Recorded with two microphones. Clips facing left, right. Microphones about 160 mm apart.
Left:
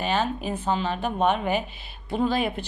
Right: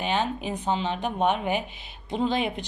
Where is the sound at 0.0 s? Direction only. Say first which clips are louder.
Left 1 dB; 15° right (ahead or behind).